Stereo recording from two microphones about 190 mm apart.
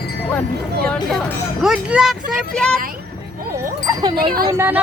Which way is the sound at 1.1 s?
Centre (ahead or behind).